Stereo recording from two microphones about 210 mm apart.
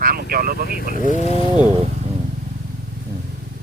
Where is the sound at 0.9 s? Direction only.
40° left (ahead or behind).